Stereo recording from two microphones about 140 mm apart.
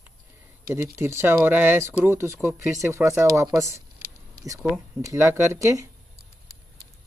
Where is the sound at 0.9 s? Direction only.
15° right (ahead or behind).